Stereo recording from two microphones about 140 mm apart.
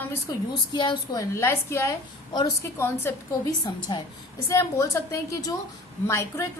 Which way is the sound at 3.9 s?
30° left (ahead or behind).